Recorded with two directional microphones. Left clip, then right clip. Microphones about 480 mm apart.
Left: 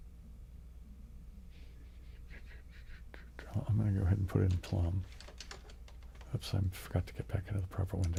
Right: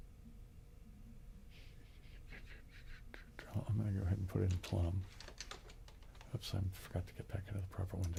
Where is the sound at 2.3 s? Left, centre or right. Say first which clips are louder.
Even; centre.